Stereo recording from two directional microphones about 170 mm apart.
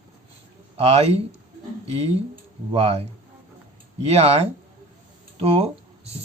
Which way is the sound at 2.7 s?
35° right (ahead or behind).